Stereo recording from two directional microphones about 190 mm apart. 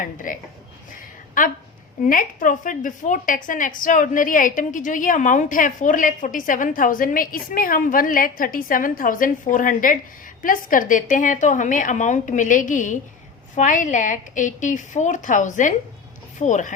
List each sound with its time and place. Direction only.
0.0 s a woman's voice: 45° left (ahead or behind)
1.4 s a woman's voice: 45° left (ahead or behind)